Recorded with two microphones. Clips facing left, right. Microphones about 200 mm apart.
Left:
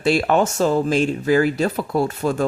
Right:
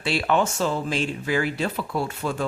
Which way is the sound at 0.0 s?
45° left (ahead or behind).